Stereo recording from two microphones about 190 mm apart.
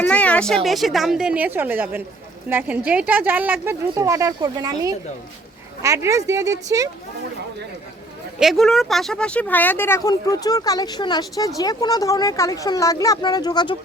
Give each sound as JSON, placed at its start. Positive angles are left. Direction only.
{"t": 0.1, "sound": "a woman's voice", "side_deg": 5}
{"t": 8.4, "sound": "speech", "side_deg": 0}